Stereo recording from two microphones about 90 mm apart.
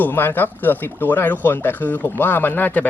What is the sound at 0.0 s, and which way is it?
Speech, 20° left (ahead or behind).